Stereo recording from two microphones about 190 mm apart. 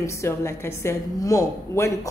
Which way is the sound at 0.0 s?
15° left (ahead or behind).